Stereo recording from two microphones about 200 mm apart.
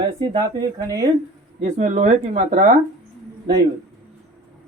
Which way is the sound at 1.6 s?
35° right (ahead or behind).